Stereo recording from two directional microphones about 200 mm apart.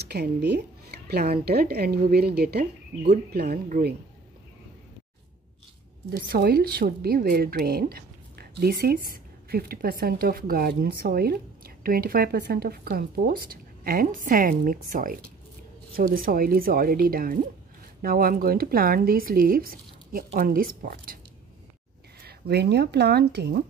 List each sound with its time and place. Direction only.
0.0 s speech: 55° right (ahead or behind)
6.0 s speech: 50° right (ahead or behind)
22.2 s speech: 55° right (ahead or behind)